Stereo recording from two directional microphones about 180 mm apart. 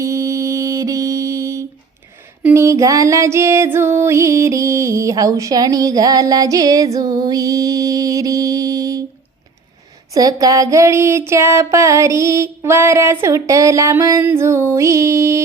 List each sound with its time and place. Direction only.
0.0 s mantra: 15° right (ahead or behind)
2.4 s music: 15° right (ahead or behind)
10.2 s a sound: 20° right (ahead or behind)